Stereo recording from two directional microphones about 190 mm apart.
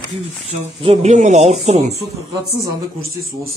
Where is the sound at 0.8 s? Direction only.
35° right (ahead or behind).